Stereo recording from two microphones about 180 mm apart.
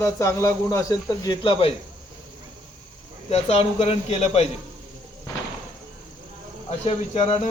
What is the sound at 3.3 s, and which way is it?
Speech, 35° left (ahead or behind).